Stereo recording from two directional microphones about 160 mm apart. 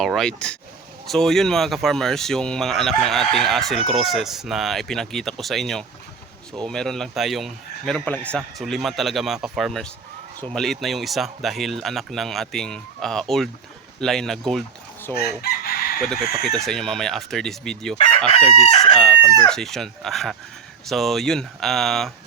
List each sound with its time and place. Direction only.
0.0 s speech: centre (ahead or behind)
15.1 s chicken: 75° left (ahead or behind)
16.0 s speech: centre (ahead or behind)
17.9 s chicken: 35° left (ahead or behind)
19.4 s speech: 5° left (ahead or behind)